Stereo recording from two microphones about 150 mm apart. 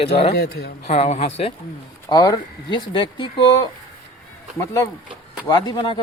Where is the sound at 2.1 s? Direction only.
30° left (ahead or behind).